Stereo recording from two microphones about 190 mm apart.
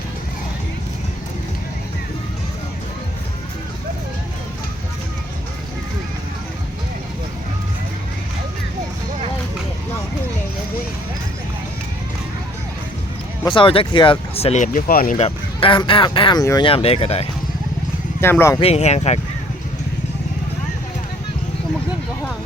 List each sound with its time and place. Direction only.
13.4 s speech: 25° left (ahead or behind); by 15.1 s 45° left (ahead or behind)
15.2 s speech: 25° left (ahead or behind)
18.2 s speech: 10° left (ahead or behind)
18.6 s speech: 35° left (ahead or behind)